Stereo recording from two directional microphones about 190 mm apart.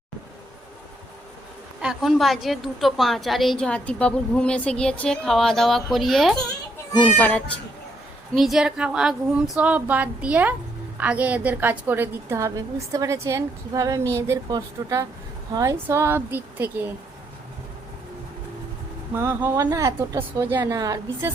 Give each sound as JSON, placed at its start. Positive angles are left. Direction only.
{"t": 1.8, "sound": "a woman's voice", "side_deg": 0}
{"t": 19.1, "sound": "speech", "side_deg": -10}